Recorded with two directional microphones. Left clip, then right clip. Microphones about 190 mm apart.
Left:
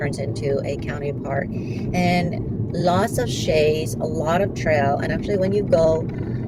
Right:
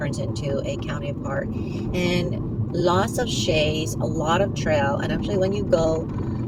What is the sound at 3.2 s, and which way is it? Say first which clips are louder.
Speech: left 3 dB; 20° left (ahead or behind).